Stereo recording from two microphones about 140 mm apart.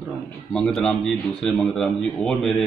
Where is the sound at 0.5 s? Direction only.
5° left (ahead or behind).